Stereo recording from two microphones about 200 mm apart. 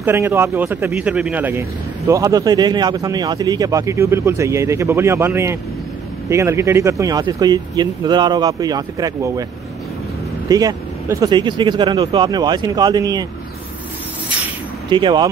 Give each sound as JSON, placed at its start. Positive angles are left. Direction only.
{"t": 0.0, "sound": "speech", "side_deg": -10}
{"t": 10.5, "sound": "speech", "side_deg": -20}
{"t": 14.9, "sound": "speech", "side_deg": -25}